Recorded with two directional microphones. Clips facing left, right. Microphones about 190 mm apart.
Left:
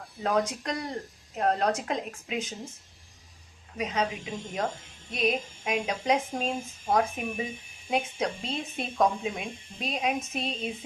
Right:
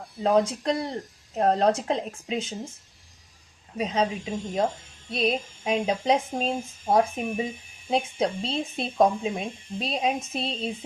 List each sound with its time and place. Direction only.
0.2 s speech: 30° right (ahead or behind)
3.8 s speech: 30° right (ahead or behind)
5.1 s speech: 30° right (ahead or behind)